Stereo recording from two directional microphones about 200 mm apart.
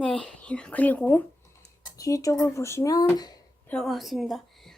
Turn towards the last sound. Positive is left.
turn(degrees=0)  # may be behind; listen again after turning